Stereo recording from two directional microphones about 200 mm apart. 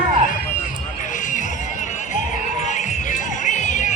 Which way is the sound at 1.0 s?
40° left (ahead or behind).